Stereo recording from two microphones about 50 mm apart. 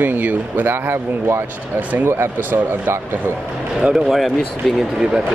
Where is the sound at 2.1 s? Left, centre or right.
Right.